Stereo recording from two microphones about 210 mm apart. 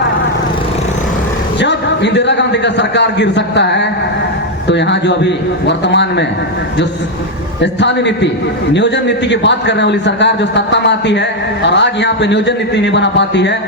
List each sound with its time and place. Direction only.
1.5 s a man's voice: 55° left (ahead or behind)
7.6 s a man's voice: 55° left (ahead or behind)